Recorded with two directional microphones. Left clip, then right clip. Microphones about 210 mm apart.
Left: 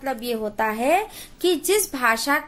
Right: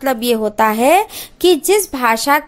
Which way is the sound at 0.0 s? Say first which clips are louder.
Right 10 dB; 45° right (ahead or behind).